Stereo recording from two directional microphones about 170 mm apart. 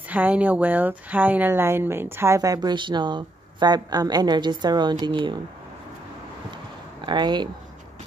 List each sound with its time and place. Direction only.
0.1 s speech: 10° right (ahead or behind); by 5.4 s 25° right (ahead or behind)
7.1 s speech: 25° right (ahead or behind)